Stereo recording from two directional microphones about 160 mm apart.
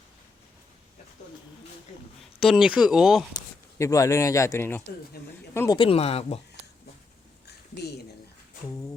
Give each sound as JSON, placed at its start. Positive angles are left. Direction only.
{"t": 2.4, "sound": "speech", "side_deg": -5}
{"t": 3.8, "sound": "speech", "side_deg": 20}
{"t": 5.2, "sound": "speech", "side_deg": 85}
{"t": 5.5, "sound": "speech", "side_deg": 25}
{"t": 7.4, "sound": "a sound", "side_deg": 90}